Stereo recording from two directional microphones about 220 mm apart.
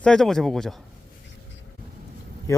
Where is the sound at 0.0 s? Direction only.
Centre (ahead or behind).